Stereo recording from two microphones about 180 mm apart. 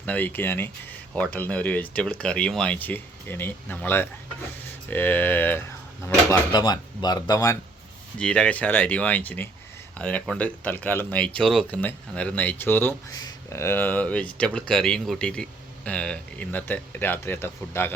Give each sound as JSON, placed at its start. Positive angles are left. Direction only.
{"t": 0.0, "sound": "speech", "side_deg": 10}
{"t": 6.5, "sound": "speech", "side_deg": 20}
{"t": 8.2, "sound": "speech", "side_deg": 5}